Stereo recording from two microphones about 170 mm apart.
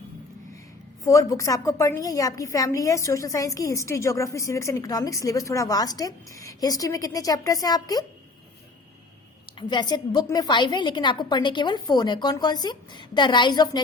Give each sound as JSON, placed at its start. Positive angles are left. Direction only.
{"t": 1.0, "sound": "a woman's voice", "side_deg": 20}
{"t": 9.6, "sound": "a woman's voice", "side_deg": 25}